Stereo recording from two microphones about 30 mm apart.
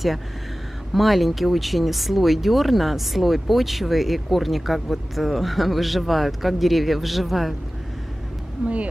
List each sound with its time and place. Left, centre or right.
0.9 s speech: centre
8.6 s speech: right